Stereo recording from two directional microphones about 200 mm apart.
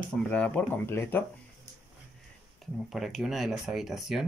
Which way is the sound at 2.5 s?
Centre (ahead or behind).